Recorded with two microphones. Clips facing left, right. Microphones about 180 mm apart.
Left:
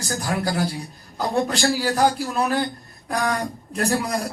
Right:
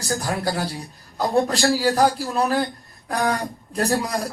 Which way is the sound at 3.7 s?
35° right (ahead or behind).